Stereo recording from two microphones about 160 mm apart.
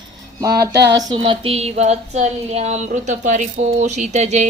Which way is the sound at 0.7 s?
90° right.